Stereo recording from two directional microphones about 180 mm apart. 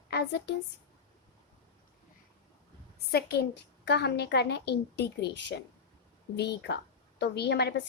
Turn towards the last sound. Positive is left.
turn(degrees=65)  # may be behind; listen again after turning